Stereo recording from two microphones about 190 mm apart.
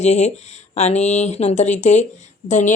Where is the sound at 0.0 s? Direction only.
35° left (ahead or behind).